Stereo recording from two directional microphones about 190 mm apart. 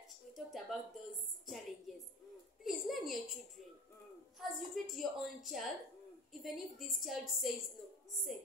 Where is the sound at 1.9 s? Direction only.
Centre (ahead or behind).